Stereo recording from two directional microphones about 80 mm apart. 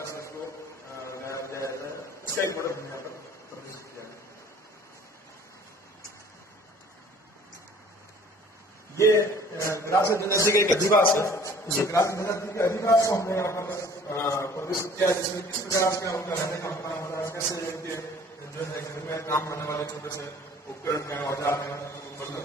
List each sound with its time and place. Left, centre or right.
0.0 s a sound: left
2.5 s a man's voice: left
8.9 s a man's voice: left